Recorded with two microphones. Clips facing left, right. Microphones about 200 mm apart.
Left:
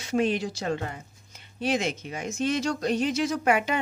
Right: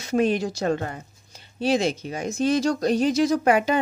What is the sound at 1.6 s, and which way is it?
Speech, 30° right (ahead or behind).